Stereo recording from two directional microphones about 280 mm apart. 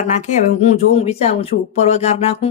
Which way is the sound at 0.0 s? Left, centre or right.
Left.